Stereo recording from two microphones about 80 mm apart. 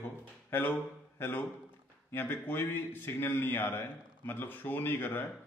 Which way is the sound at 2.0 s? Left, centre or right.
Left.